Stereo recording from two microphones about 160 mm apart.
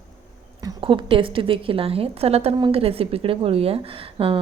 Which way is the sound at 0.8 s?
35° right (ahead or behind).